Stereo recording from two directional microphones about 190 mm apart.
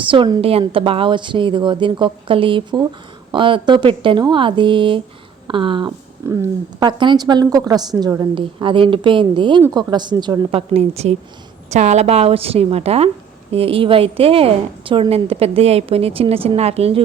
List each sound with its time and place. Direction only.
0.1 s a woman's voice: 25° right (ahead or behind)